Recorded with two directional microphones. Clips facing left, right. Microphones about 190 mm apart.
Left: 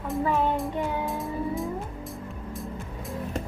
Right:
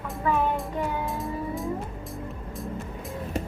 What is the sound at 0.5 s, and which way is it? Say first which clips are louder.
Music: left 1 dB; centre (ahead or behind).